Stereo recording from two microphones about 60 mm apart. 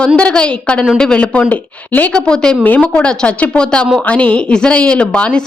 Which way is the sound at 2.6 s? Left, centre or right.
Left.